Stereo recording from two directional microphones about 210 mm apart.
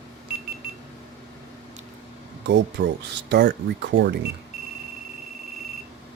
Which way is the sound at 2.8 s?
60° right (ahead or behind).